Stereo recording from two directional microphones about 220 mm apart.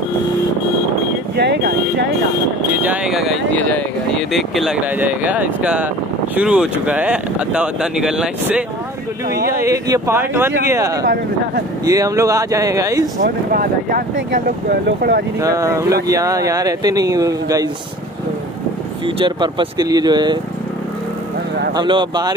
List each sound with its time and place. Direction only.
1.3 s vehicle: 50° right (ahead or behind)
2.7 s speech: 5° right (ahead or behind)
9.3 s speech: 45° right (ahead or behind)
9.6 s speech: 15° right (ahead or behind)
13.2 s speech: 40° right (ahead or behind)
15.4 s speech: 15° right (ahead or behind)
19.0 s speech: 20° right (ahead or behind)
21.7 s speech: 20° right (ahead or behind)